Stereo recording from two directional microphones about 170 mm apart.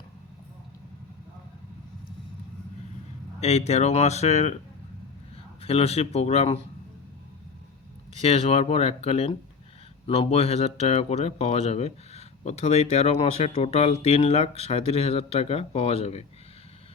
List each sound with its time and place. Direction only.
3.4 s speech: 40° left (ahead or behind)
5.6 s speech: 35° left (ahead or behind)
8.2 s speech: 35° left (ahead or behind)